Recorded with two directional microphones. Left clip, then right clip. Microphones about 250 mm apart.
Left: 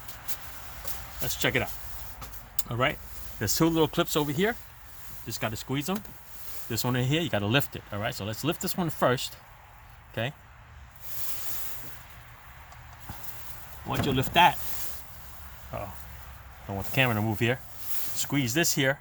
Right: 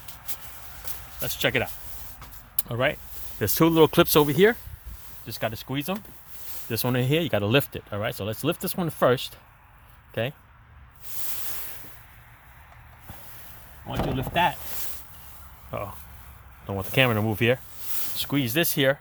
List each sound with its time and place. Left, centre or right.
1.2 s speech: right
14.2 s speech: centre
15.7 s speech: right